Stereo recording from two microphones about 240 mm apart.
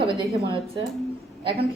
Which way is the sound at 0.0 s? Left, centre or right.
Right.